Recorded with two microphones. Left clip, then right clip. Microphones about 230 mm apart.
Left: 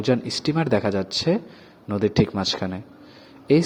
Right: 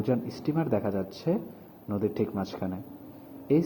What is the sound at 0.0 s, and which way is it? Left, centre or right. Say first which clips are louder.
Speech: left 7 dB; left.